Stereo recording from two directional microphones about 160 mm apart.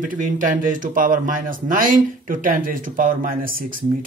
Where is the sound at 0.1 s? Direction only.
55° right (ahead or behind).